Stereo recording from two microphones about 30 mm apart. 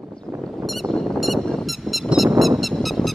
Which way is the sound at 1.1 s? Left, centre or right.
Centre.